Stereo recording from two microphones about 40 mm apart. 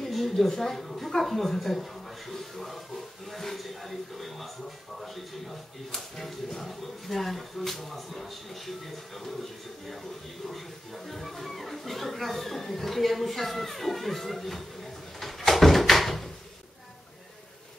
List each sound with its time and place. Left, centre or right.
0.0 s a sound: centre
0.5 s speech: centre
10.4 s speech: centre
15.1 s door: centre